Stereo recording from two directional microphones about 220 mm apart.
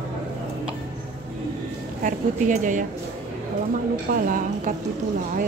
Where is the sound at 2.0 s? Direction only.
35° right (ahead or behind).